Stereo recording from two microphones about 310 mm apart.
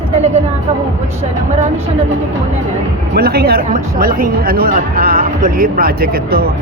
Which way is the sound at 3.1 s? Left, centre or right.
Right.